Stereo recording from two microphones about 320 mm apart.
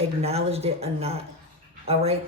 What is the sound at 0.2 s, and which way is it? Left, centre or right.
Speech, centre.